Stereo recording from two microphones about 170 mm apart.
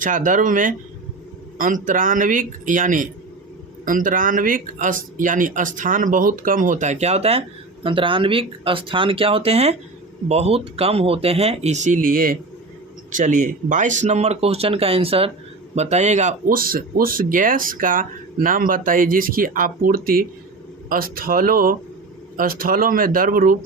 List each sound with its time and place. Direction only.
0.0 s speech: 50° right (ahead or behind)
16.6 s speech: 60° right (ahead or behind)